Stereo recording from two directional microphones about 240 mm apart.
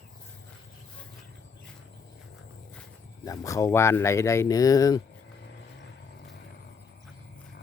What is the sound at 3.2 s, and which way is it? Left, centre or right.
Speech, centre.